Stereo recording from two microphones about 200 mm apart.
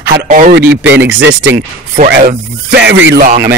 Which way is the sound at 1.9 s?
45° right (ahead or behind).